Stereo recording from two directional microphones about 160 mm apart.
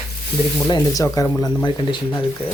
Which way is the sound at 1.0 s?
20° left (ahead or behind).